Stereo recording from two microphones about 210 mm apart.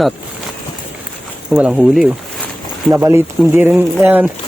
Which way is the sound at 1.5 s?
Centre (ahead or behind).